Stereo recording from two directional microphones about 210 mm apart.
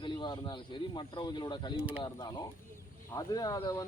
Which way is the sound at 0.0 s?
20° left (ahead or behind).